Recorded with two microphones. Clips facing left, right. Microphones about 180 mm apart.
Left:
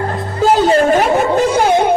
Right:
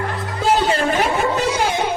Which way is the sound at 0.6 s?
45° left (ahead or behind).